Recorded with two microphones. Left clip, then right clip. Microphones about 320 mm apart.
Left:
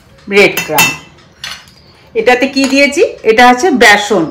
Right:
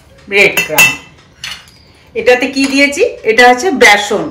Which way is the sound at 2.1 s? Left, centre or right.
Left.